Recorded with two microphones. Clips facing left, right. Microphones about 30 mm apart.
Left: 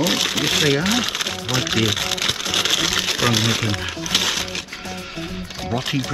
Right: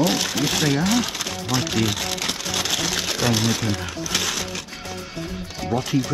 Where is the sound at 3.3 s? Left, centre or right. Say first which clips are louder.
Left 2 dB; left.